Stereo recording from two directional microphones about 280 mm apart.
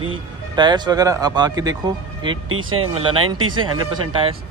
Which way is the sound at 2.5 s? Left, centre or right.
Right.